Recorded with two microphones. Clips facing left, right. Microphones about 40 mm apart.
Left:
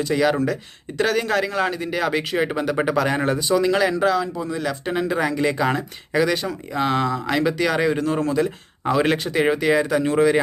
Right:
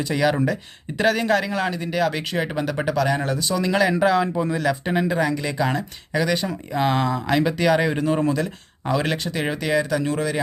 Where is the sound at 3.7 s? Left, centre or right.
Centre.